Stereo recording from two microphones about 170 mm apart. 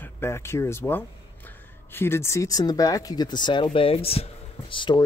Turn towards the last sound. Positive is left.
turn(degrees=30)  # may be behind; listen again after turning